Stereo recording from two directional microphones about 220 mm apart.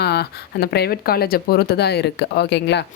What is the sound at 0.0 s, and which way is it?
A woman's voice, 45° left (ahead or behind).